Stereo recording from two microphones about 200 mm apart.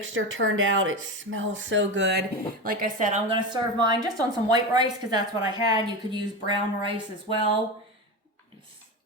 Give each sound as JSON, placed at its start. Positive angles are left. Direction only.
{"t": 0.0, "sound": "speech", "side_deg": -75}
{"t": 2.6, "sound": "a woman's voice", "side_deg": -40}
{"t": 3.2, "sound": "speech", "side_deg": -25}